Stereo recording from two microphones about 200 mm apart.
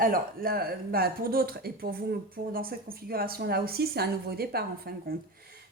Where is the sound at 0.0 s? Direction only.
45° right (ahead or behind).